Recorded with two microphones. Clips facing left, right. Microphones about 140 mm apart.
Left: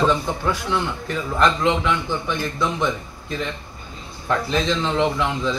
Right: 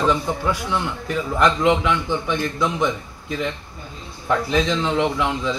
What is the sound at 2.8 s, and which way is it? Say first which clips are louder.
A man's voice: right 1 dB; 10° right (ahead or behind).